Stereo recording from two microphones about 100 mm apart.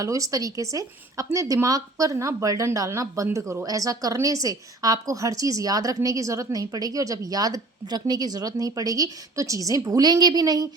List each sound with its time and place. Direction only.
0.0 s a woman's voice: 35° right (ahead or behind)